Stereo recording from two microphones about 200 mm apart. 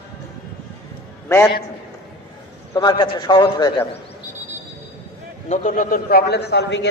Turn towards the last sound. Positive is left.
turn(degrees=60)  # may be behind; listen again after turning